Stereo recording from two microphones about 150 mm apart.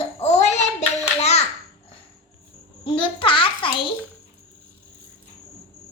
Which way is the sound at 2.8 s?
35° left (ahead or behind).